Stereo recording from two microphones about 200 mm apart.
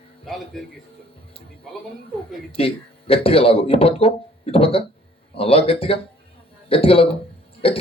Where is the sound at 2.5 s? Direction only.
30° left (ahead or behind).